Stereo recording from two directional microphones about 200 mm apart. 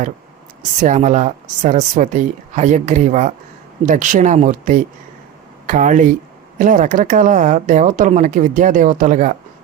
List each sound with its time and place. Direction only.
0.8 s speech: 35° right (ahead or behind)